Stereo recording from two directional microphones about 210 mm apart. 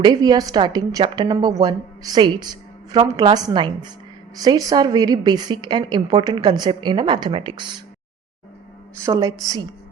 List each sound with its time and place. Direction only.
0.0 s a woman's voice: 20° right (ahead or behind)
9.0 s a woman's voice: 15° right (ahead or behind)